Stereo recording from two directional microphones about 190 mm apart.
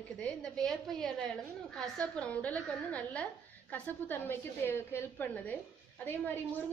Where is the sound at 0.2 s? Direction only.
5° left (ahead or behind).